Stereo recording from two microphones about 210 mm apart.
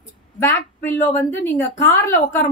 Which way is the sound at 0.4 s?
10° left (ahead or behind).